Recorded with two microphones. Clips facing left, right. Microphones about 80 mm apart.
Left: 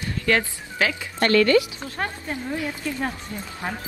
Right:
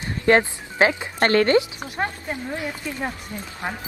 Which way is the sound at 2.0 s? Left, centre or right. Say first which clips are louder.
Right 2 dB; centre.